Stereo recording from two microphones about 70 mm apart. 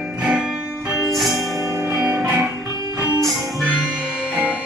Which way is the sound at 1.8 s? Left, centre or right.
Right.